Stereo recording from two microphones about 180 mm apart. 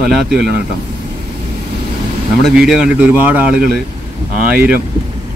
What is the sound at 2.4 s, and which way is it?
Speech, 5° right (ahead or behind).